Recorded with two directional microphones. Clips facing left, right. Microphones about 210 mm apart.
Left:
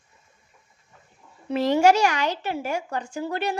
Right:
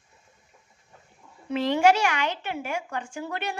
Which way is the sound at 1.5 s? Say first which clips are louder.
Left 3 dB; 40° left (ahead or behind).